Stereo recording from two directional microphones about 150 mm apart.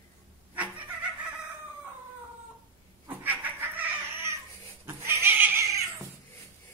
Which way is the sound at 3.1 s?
10° right (ahead or behind).